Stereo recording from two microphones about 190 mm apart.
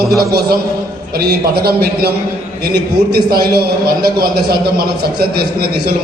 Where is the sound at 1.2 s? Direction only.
55° right (ahead or behind).